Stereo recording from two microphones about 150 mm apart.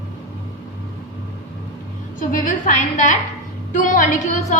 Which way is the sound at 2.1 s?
60° left (ahead or behind).